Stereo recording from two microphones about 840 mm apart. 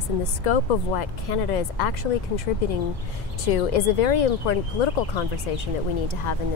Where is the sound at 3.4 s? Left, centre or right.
Left.